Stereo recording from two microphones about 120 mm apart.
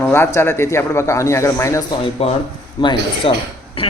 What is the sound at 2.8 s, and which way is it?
Speech, 40° left (ahead or behind).